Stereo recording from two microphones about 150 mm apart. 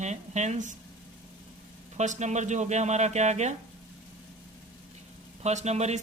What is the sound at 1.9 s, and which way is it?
Speech, 50° right (ahead or behind).